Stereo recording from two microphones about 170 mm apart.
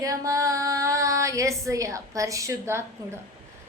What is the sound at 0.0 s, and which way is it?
Speech, 20° right (ahead or behind).